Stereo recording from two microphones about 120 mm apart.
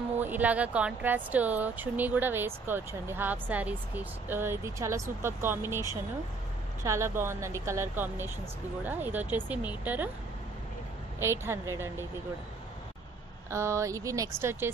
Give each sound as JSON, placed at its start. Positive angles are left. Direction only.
{"t": 0.2, "sound": "speech", "side_deg": -15}
{"t": 11.1, "sound": "speech", "side_deg": -20}
{"t": 13.5, "sound": "speech", "side_deg": -25}